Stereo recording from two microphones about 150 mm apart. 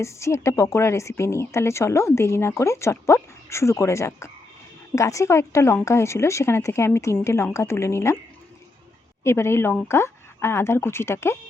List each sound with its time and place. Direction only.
0.0 s a woman's voice: 20° left (ahead or behind)
9.2 s speech: 15° left (ahead or behind)